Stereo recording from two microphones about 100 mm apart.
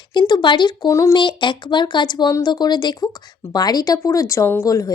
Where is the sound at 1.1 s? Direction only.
55° left (ahead or behind); by 4.9 s 30° left (ahead or behind).